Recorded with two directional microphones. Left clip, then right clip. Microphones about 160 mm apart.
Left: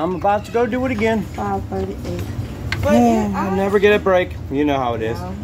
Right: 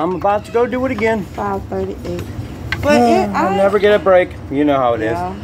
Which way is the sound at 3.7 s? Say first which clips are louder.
Even; 15° left (ahead or behind).